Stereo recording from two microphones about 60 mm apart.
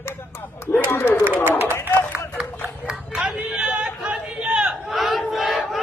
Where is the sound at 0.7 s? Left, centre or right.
Left.